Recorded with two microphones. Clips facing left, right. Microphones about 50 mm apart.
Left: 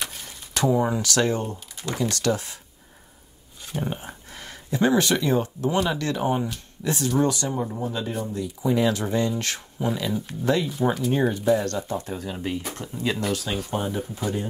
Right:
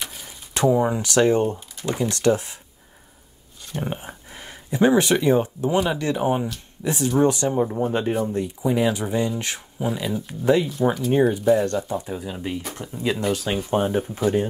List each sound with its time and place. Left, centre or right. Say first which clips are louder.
0.0 s a sound: left 1 dB; centre
0.7 s speech: right 3 dB; centre
0.9 s speech: right 5 dB; right
3.8 s speech: right 3 dB; centre
7.8 s speech: right 6 dB; right
8.6 s speech: even; centre
10.7 s speech: right 2 dB; centre
11.1 s speech: right 5 dB; centre
12.3 s speech: even; centre
12.9 s speech: right 3 dB; centre
13.3 s speech: right 4 dB; right